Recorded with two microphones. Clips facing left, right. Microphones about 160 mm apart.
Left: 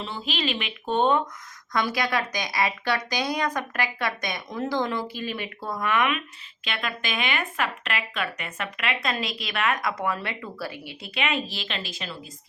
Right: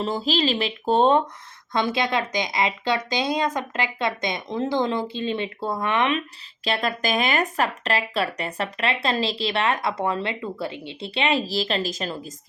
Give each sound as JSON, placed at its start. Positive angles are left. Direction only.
{"t": 0.0, "sound": "a woman's voice", "side_deg": -40}